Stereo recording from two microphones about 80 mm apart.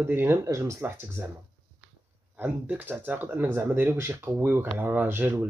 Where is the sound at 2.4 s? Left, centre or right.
Right.